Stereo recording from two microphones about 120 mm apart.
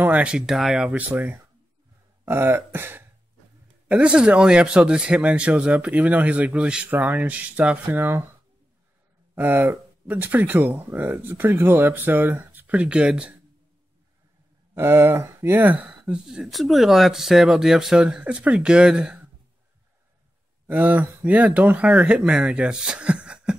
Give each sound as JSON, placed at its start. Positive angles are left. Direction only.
{"t": 0.0, "sound": "speech", "side_deg": -10}
{"t": 9.3, "sound": "speech", "side_deg": -15}
{"t": 14.7, "sound": "speech", "side_deg": -20}
{"t": 20.6, "sound": "speech", "side_deg": -15}